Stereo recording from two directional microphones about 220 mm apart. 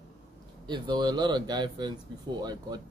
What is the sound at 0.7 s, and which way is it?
Speech, 20° right (ahead or behind).